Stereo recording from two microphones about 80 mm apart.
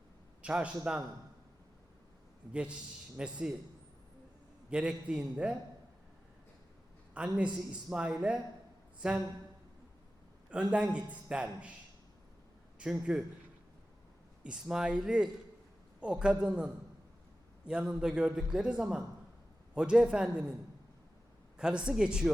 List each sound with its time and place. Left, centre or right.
0.4 s a man's voice: centre
2.5 s a man's voice: centre
4.7 s a man's voice: centre
7.1 s a man's voice: centre
10.5 s a man's voice: centre
12.8 s a man's voice: centre
14.4 s a man's voice: centre
21.6 s a man's voice: centre